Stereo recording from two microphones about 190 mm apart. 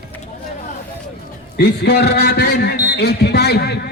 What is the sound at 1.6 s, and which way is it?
A man's voice, 55° left (ahead or behind).